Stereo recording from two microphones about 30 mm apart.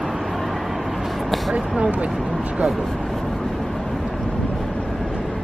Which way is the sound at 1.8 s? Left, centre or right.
Right.